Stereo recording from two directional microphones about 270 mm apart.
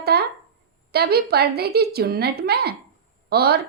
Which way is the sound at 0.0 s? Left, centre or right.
Right.